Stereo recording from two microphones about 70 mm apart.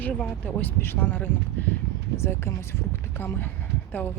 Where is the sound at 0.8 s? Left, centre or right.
Left.